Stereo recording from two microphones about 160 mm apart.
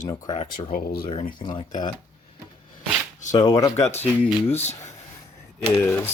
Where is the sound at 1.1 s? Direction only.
45° left (ahead or behind).